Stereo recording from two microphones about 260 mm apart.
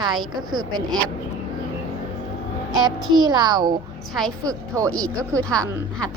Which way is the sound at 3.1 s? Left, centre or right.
Centre.